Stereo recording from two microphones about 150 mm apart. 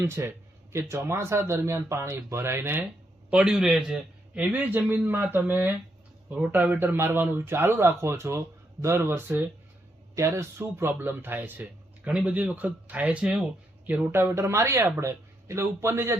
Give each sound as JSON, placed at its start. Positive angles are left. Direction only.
{"t": 0.0, "sound": "speech", "side_deg": -20}